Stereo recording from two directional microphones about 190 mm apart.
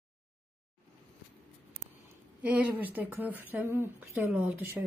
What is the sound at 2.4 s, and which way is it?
A woman's voice, 5° right (ahead or behind).